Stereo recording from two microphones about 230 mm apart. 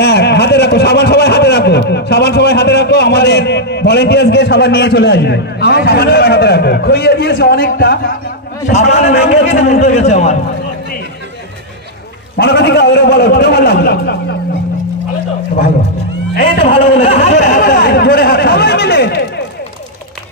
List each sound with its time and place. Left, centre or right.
0.0 s a man's voice: left
8.6 s a man's voice: left
12.4 s a man's voice: left
16.3 s a man's voice: left
17.6 s a sound: left